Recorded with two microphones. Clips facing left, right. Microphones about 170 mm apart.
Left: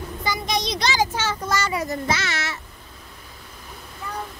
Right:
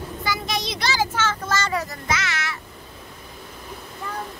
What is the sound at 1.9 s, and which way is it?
Speech, 30° left (ahead or behind).